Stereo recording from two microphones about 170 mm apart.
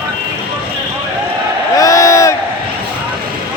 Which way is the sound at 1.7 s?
20° left (ahead or behind).